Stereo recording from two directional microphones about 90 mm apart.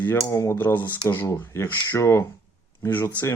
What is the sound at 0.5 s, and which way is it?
Speech, 20° left (ahead or behind).